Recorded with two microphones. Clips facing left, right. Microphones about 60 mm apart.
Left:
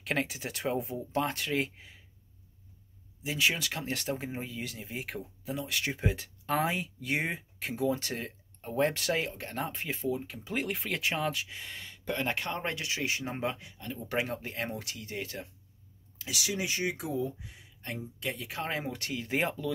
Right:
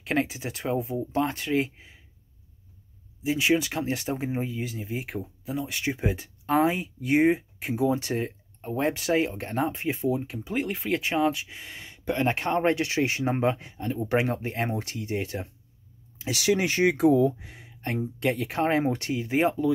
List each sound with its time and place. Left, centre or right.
0.0 s speech: centre
3.3 s speech: centre
8.6 s speech: centre
9.2 s speech: right
10.3 s speech: centre; by 15.4 s right
16.3 s speech: right
18.6 s speech: right
19.2 s speech: centre